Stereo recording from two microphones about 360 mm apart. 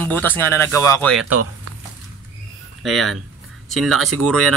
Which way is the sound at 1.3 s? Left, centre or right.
Right.